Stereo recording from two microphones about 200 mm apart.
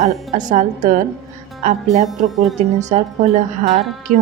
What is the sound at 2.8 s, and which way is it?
Speech, 35° right (ahead or behind).